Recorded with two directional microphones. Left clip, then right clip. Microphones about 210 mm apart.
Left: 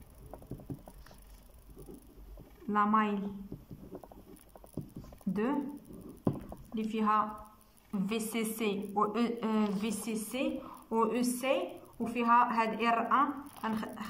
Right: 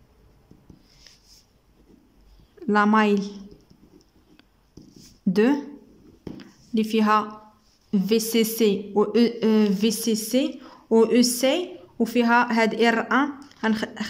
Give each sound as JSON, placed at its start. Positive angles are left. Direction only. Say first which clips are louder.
{"t": 2.7, "sound": "a woman's voice", "louder": "right 9 dB", "side_deg": -45}
{"t": 5.3, "sound": "speech", "louder": "right 13 dB", "side_deg": -45}
{"t": 6.7, "sound": "a woman's voice", "louder": "right 10 dB", "side_deg": -45}
{"t": 7.9, "sound": "speech", "louder": "right 14 dB", "side_deg": -35}